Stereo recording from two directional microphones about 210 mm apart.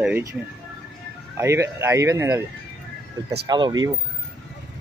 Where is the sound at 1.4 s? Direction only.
15° right (ahead or behind).